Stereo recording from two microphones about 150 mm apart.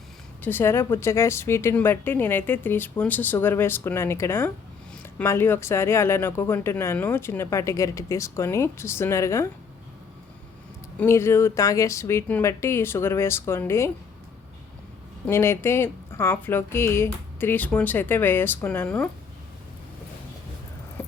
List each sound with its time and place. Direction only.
0.4 s speech: 15° left (ahead or behind)
10.9 s speech: 15° left (ahead or behind)
15.3 s speech: 15° left (ahead or behind)